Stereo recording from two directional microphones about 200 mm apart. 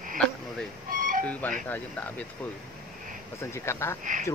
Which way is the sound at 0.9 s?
45° right (ahead or behind).